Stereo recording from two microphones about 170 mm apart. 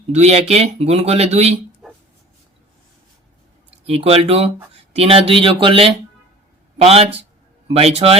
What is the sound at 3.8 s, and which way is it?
Speech, 35° right (ahead or behind).